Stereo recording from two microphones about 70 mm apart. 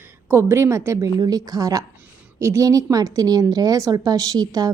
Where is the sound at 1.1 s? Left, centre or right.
Right.